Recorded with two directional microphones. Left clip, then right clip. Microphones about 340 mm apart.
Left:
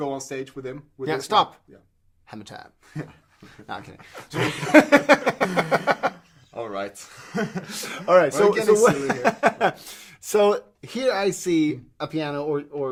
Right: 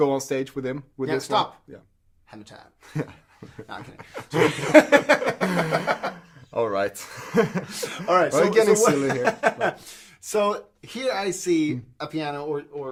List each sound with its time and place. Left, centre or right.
0.0 s speech: right
1.0 s speech: centre
3.7 s speech: centre
6.5 s speech: right
7.7 s speech: centre